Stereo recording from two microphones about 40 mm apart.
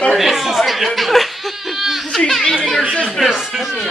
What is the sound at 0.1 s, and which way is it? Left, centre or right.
Chuckle, centre.